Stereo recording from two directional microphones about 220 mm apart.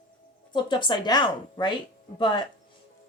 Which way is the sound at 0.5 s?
20° left (ahead or behind).